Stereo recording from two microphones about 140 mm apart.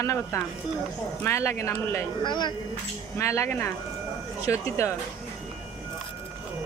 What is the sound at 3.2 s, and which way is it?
Speech, 20° left (ahead or behind).